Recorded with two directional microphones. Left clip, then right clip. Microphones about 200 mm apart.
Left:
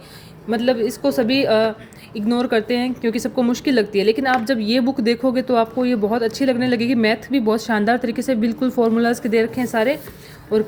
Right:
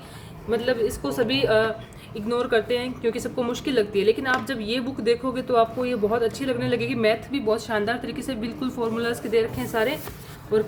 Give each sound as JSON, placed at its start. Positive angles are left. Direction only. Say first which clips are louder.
{"t": 0.5, "sound": "a woman's voice", "louder": "left 4 dB", "side_deg": 30}